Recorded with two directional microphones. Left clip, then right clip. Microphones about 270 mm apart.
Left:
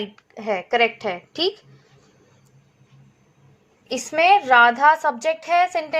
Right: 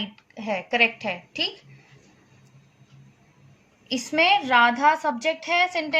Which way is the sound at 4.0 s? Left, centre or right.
Centre.